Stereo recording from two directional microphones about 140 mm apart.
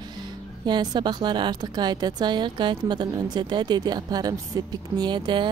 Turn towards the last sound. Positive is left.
turn(degrees=-35)  # may be behind; listen again after turning